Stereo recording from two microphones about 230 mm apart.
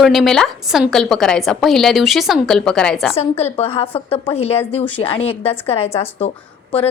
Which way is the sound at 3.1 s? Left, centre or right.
Left.